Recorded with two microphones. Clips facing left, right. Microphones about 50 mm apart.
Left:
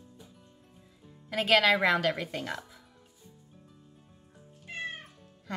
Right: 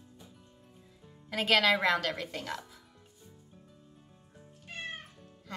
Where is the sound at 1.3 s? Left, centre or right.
Centre.